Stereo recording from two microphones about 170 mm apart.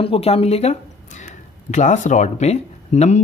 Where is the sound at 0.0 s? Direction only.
35° left (ahead or behind).